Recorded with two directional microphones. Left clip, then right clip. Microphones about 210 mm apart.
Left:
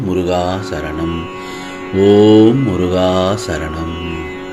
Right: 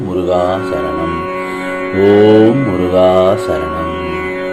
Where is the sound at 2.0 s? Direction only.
25° left (ahead or behind).